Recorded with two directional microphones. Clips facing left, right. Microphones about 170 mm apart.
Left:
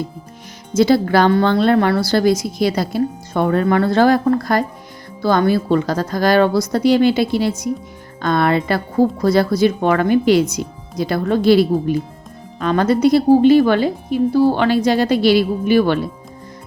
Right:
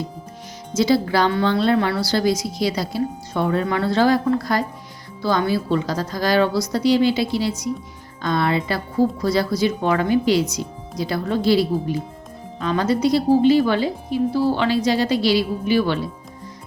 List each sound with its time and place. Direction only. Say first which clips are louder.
0.7 s a woman's voice: left 4 dB; 55° left (ahead or behind)